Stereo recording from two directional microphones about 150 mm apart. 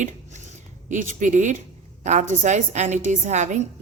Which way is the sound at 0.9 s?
55° right (ahead or behind).